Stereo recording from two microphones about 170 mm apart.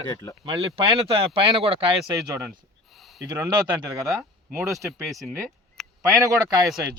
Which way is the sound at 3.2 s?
25° right (ahead or behind).